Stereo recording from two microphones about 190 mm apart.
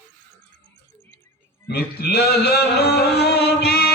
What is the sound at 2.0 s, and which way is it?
Music, 55° left (ahead or behind).